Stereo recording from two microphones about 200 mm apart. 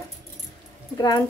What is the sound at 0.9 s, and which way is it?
Speech, 20° left (ahead or behind).